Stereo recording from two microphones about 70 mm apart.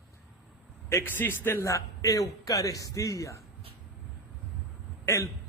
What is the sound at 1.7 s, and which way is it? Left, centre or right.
A man's voice, left.